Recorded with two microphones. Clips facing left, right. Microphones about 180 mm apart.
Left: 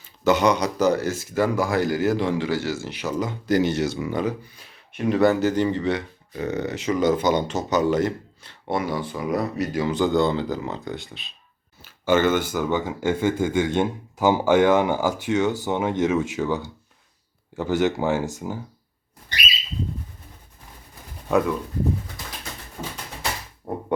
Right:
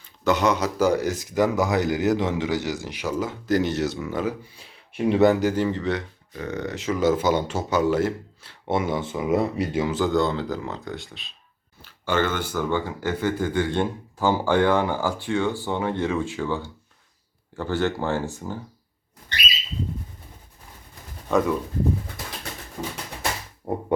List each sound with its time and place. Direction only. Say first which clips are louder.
0.3 s a man's voice: left 2 dB; centre (ahead or behind)
4.5 s speech: right 4 dB; 30° right (ahead or behind)
5.2 s a man's voice: even; 15° right (ahead or behind)
5.6 s speech: left 2 dB; centre (ahead or behind)
8.6 s speech: right 1 dB; 20° right (ahead or behind)
9.8 s speech: left 3 dB; 5° right (ahead or behind)
12.0 s speech: left 5 dB; 20° left (ahead or behind)
17.6 s speech: left 3 dB; 15° left (ahead or behind)
21.2 s speech: left 1 dB; 5° left (ahead or behind)